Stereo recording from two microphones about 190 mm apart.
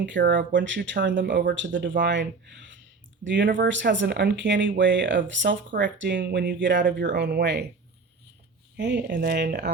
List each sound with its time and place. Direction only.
0.3 s speech: 70° right (ahead or behind)
8.7 s speech: 65° right (ahead or behind)